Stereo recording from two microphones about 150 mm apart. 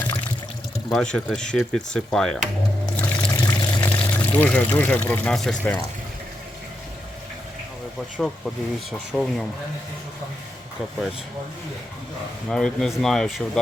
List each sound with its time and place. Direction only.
0.0 s pour: 10° left (ahead or behind)
0.9 s speech: 5° left (ahead or behind)
2.9 s trickle: 10° left (ahead or behind)
3.3 s pour: 25° left (ahead or behind)
3.8 s pour: 10° left (ahead or behind)
4.8 s speech: 15° left (ahead or behind)
8.2 s speech: 5° left (ahead or behind)
12.5 s speech: 5° left (ahead or behind)